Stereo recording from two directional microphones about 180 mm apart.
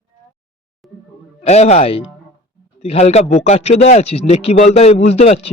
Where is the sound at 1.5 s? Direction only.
40° left (ahead or behind).